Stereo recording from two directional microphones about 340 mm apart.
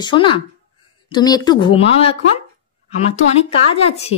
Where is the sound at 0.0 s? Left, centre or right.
Centre.